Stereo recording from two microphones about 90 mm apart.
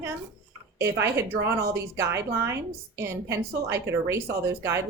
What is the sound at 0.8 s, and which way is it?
A woman's voice, 30° right (ahead or behind).